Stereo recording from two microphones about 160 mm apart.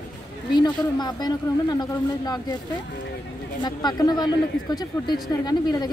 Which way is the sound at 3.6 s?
25° left (ahead or behind).